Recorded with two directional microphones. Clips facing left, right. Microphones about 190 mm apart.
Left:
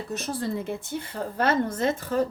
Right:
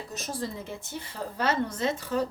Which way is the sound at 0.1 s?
60° left (ahead or behind).